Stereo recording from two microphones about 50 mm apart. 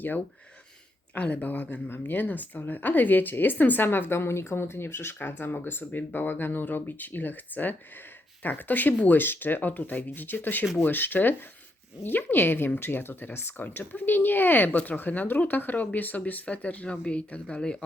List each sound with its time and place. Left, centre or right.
1.1 s a woman's voice: left